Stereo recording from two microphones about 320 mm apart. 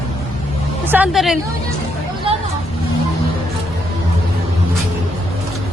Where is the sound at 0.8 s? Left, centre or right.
Centre.